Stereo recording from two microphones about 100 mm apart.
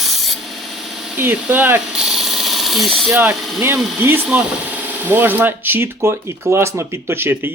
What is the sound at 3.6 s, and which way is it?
Speech, 25° right (ahead or behind).